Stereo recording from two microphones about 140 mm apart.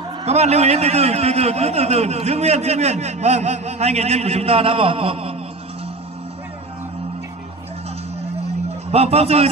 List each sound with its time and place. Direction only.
0.2 s a man's voice: 50° right (ahead or behind)
8.9 s a man's voice: 45° right (ahead or behind)